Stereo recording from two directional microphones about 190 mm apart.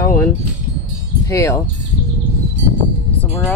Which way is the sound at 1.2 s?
15° left (ahead or behind).